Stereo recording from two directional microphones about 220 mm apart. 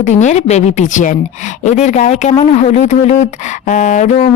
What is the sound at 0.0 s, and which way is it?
A woman's voice, 30° left (ahead or behind).